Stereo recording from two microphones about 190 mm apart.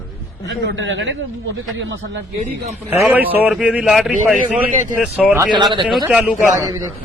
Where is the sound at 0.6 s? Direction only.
75° right (ahead or behind).